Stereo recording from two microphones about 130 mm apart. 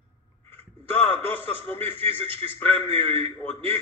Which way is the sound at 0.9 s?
50° right (ahead or behind).